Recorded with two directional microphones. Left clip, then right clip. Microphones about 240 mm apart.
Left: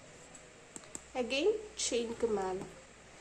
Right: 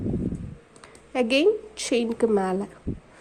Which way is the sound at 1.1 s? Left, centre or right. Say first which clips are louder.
Right 11 dB; right.